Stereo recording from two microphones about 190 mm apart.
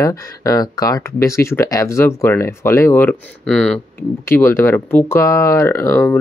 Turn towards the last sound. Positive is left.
turn(degrees=10)  # may be behind; listen again after turning